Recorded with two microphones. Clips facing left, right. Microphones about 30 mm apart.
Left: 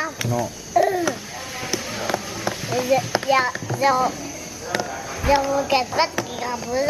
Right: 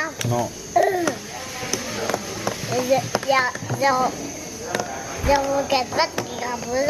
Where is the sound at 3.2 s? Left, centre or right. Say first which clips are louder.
Even; centre.